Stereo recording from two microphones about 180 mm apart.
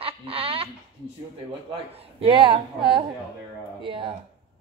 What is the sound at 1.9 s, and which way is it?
Speech, 35° right (ahead or behind).